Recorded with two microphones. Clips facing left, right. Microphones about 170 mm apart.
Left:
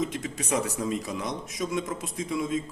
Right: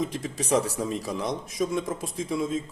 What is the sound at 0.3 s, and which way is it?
Speech, 30° right (ahead or behind).